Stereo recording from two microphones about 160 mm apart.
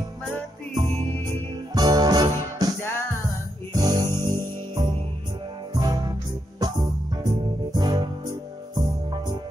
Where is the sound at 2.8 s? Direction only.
15° left (ahead or behind).